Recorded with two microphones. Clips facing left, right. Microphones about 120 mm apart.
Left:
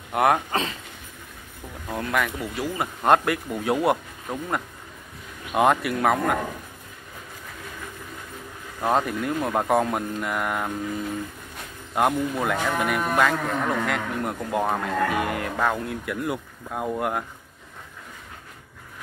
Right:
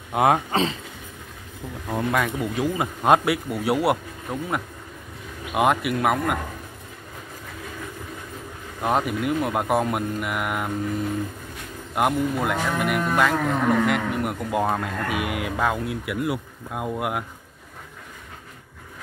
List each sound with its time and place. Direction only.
0.1 s speech: 20° right (ahead or behind)
1.9 s speech: 20° right (ahead or behind)
8.8 s speech: 5° right (ahead or behind)
11.9 s speech: centre (ahead or behind)
15.0 s speech: 90° right
15.4 s speech: 10° right (ahead or behind)